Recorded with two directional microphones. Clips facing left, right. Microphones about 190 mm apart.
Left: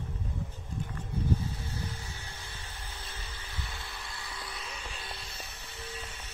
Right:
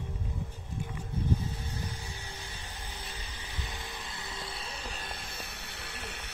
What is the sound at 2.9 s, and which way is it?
Vacuum cleaner, 15° right (ahead or behind).